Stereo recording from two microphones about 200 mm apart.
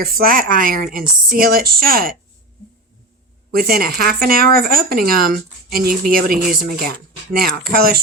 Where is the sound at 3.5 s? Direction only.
50° right (ahead or behind).